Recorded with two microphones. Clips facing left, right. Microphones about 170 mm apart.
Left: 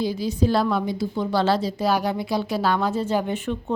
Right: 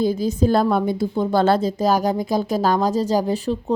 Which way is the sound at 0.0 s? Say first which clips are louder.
Right 4 dB; 50° right (ahead or behind).